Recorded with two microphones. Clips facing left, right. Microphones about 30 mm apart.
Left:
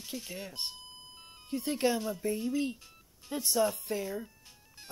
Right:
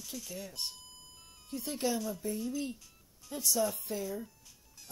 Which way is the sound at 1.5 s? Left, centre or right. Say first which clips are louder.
Left 4 dB; left.